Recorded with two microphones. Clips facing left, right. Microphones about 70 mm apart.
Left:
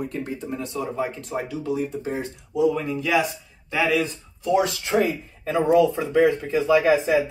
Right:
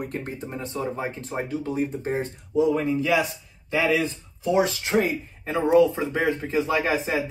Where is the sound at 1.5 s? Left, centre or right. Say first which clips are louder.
Right 1 dB; right.